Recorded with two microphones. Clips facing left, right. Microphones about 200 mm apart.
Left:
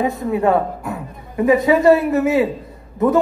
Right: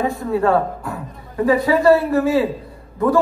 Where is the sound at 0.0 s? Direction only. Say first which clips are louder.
Left 1 dB; 20° left (ahead or behind).